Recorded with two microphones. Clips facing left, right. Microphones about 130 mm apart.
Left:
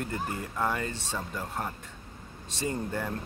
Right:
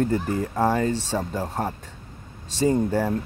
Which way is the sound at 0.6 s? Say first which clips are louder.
Right 8 dB; 30° right (ahead or behind).